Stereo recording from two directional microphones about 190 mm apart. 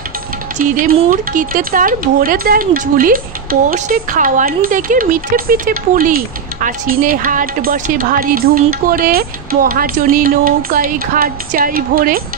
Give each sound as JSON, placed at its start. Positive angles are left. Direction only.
{"t": 0.6, "sound": "speech", "side_deg": -50}